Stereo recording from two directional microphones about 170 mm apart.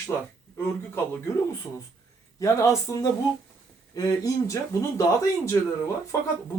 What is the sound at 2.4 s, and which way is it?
Speech, 20° left (ahead or behind).